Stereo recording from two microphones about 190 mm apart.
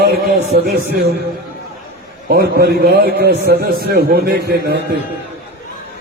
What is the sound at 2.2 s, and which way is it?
A man's voice, 55° right (ahead or behind).